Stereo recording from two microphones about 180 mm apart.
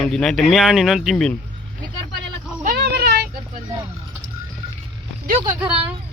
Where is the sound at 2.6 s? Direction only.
60° right (ahead or behind).